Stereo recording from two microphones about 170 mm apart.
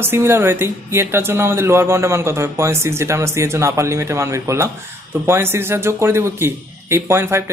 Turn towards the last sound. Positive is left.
turn(degrees=-15)  # may be behind; listen again after turning